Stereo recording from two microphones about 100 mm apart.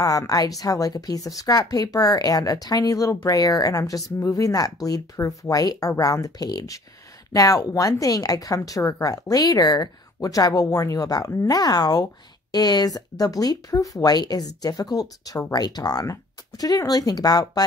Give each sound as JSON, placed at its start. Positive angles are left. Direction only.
{"t": 0.0, "sound": "a woman's voice", "side_deg": 35}